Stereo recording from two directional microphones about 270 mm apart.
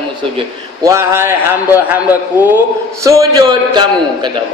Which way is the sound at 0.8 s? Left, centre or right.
Centre.